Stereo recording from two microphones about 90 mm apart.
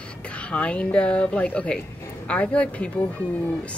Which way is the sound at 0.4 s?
10° left (ahead or behind).